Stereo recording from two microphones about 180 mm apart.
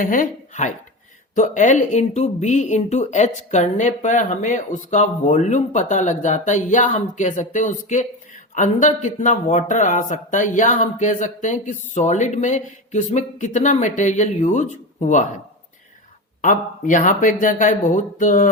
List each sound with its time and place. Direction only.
0.0 s speech: 50° left (ahead or behind)
16.4 s speech: 45° left (ahead or behind)